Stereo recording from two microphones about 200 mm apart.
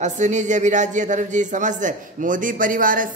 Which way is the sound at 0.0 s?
35° right (ahead or behind).